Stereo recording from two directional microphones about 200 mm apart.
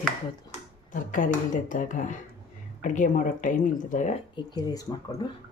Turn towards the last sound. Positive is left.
turn(degrees=20)  # may be behind; listen again after turning